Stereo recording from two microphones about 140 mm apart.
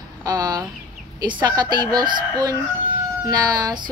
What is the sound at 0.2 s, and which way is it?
Chicken, 30° right (ahead or behind).